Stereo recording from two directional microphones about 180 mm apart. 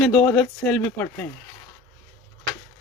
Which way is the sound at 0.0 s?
5° left (ahead or behind).